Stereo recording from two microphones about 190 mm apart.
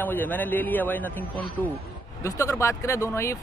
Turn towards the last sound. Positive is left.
turn(degrees=15)  # may be behind; listen again after turning